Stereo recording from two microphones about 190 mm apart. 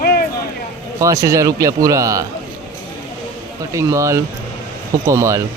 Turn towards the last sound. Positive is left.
turn(degrees=-15)  # may be behind; listen again after turning